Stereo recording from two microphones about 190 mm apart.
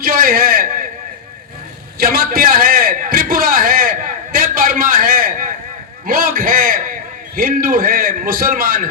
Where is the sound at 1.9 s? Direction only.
50° right (ahead or behind).